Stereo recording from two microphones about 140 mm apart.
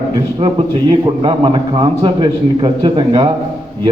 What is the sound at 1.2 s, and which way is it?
A man's voice, 40° right (ahead or behind).